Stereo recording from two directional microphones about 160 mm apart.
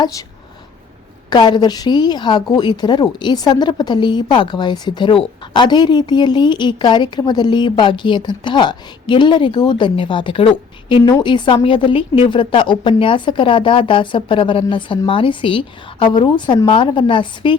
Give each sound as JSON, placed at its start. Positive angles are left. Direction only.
{"t": 0.0, "sound": "a woman's voice", "side_deg": 20}
{"t": 1.3, "sound": "a woman's voice", "side_deg": 25}